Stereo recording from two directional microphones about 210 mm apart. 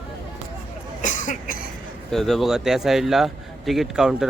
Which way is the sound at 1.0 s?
35° left (ahead or behind).